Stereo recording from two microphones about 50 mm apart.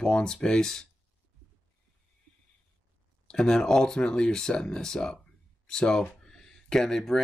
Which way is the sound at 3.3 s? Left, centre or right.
Centre.